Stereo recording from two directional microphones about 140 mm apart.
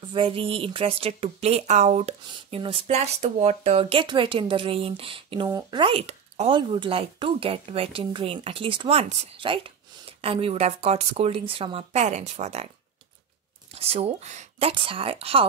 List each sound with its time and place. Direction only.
0.1 s speech: 40° right (ahead or behind)
2.3 s speech: 40° right (ahead or behind)
5.5 s speech: 30° right (ahead or behind); by 12.7 s 50° right (ahead or behind)
13.7 s speech: 45° right (ahead or behind)
14.7 s speech: 40° right (ahead or behind)